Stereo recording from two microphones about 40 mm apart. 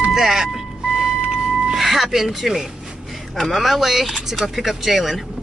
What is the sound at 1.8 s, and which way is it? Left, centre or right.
Speech, centre.